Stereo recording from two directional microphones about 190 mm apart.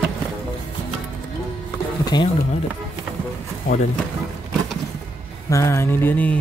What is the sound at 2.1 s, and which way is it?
Speech, 25° left (ahead or behind).